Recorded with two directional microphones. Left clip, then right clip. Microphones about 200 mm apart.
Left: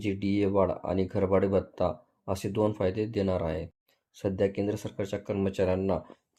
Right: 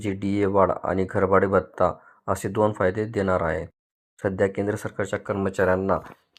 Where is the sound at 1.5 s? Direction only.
35° right (ahead or behind).